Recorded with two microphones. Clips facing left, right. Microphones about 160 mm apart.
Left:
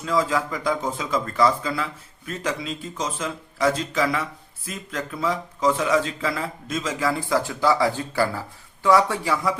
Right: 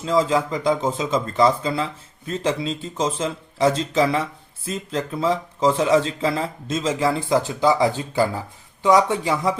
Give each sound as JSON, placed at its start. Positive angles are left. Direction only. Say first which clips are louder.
{"t": 0.0, "sound": "speech", "louder": "right 3 dB", "side_deg": -25}